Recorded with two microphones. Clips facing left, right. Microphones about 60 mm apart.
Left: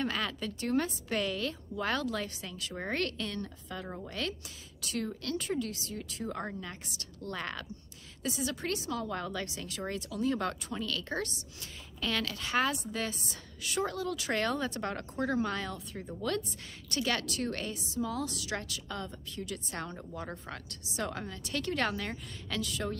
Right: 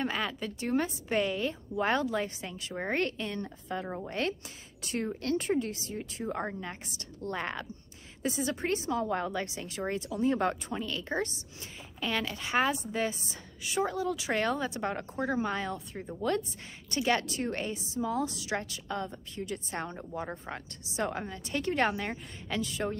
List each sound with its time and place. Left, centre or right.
0.0 s a woman's voice: centre
4.8 s a woman's voice: right